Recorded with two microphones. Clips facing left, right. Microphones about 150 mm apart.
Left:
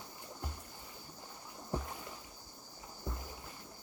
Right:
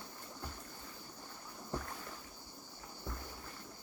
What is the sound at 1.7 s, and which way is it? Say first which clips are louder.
Boat: left 2 dB; 15° left (ahead or behind).